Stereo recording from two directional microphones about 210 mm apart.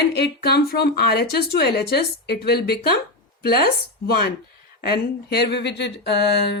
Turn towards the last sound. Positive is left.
turn(degrees=55)  # may be behind; listen again after turning